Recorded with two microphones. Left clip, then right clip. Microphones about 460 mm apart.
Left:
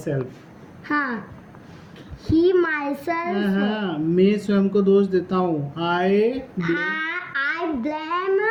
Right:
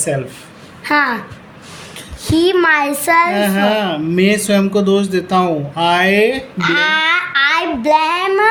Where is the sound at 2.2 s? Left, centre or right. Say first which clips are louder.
Right 6 dB; left.